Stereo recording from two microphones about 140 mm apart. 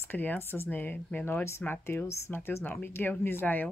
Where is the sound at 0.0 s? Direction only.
15° left (ahead or behind).